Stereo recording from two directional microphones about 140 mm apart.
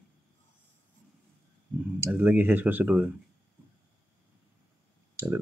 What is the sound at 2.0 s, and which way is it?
Speech, 15° right (ahead or behind).